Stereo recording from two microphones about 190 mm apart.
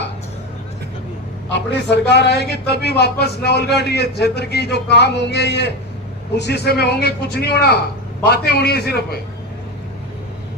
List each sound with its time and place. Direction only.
1.5 s a man's voice: 65° left (ahead or behind)